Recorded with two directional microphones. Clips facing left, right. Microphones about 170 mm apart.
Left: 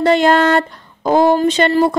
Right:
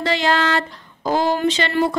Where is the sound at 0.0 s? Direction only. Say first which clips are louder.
Left 8 dB; 50° left (ahead or behind).